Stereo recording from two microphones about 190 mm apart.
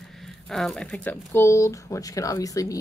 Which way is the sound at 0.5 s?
Centre (ahead or behind).